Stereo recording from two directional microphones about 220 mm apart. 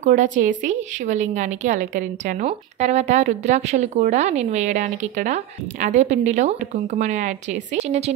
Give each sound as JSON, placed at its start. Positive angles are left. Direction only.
{"t": 0.0, "sound": "a woman's voice", "side_deg": -35}